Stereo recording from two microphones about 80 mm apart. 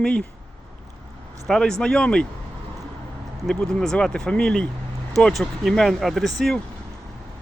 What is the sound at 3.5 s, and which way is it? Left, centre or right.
Speech, centre.